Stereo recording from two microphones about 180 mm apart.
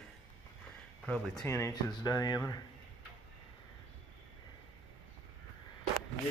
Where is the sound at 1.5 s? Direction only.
15° left (ahead or behind).